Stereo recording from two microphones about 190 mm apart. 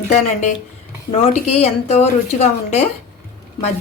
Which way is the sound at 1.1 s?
35° left (ahead or behind).